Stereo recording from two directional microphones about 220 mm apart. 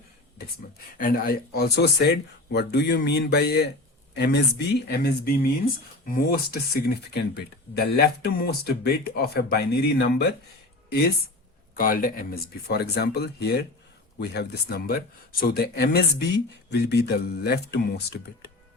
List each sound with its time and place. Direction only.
0.9 s speech: 40° left (ahead or behind)
11.8 s speech: 40° left (ahead or behind)